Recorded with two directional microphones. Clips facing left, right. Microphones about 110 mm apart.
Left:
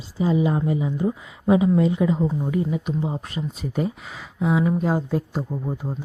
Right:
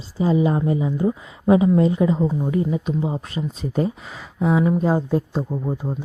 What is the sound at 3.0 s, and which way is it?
Speech, 20° right (ahead or behind).